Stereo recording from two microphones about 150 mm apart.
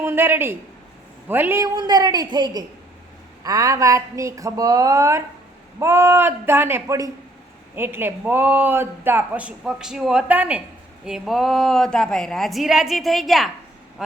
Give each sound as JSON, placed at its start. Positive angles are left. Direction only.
{"t": 0.0, "sound": "a woman's voice", "side_deg": -15}